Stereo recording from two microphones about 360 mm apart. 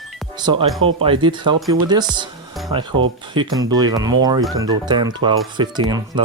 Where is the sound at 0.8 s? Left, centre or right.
Right.